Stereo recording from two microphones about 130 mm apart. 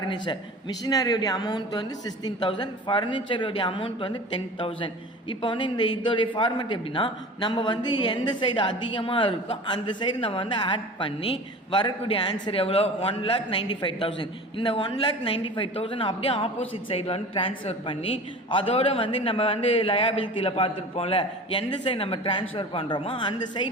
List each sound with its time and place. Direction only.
0.1 s a man's voice: 35° left (ahead or behind)